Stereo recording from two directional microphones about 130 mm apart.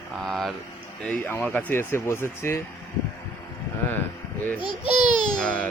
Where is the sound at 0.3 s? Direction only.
Centre (ahead or behind).